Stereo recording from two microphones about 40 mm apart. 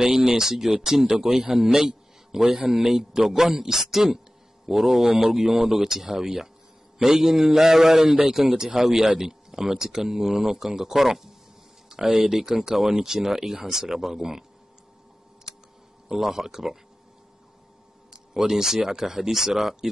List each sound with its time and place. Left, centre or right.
0.0 s a man's voice: centre
2.4 s a man's voice: right
2.7 s speech: centre
11.9 s speech: right
16.1 s speech: centre
18.3 s speech: centre